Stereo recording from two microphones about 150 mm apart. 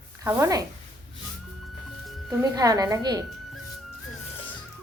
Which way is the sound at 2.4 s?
25° right (ahead or behind).